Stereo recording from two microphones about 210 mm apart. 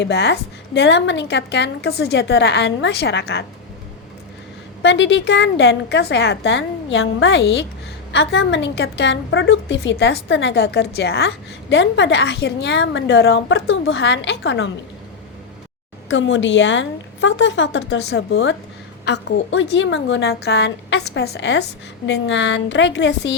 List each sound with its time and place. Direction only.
0.0 s a woman's voice: 55° left (ahead or behind)
4.8 s a woman's voice: 60° left (ahead or behind)
16.0 s a woman's voice: 65° left (ahead or behind)